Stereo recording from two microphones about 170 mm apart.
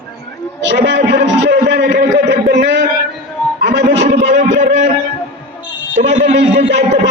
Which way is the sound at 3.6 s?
90° right.